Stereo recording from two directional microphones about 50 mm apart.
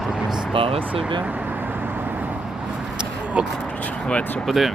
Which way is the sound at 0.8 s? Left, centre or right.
Right.